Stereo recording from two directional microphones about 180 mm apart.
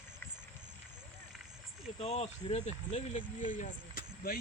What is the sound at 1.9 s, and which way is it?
Speech, 35° left (ahead or behind).